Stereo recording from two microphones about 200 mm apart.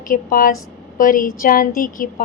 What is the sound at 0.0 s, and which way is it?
A woman's voice, 45° left (ahead or behind).